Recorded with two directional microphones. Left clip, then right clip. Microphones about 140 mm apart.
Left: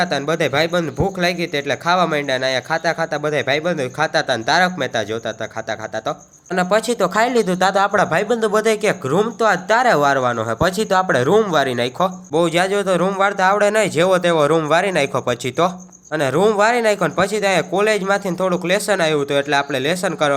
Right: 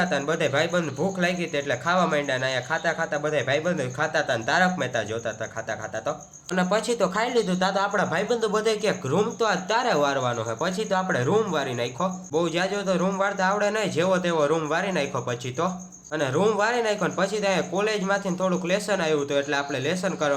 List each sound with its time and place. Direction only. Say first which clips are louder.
0.0 s speech: left 6 dB; 40° left (ahead or behind)
6.6 s speech: left 7 dB; 40° left (ahead or behind)